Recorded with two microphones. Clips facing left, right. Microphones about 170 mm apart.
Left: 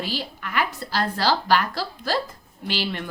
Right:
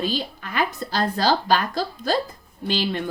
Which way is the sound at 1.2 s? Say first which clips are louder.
Right 1 dB; 20° right (ahead or behind).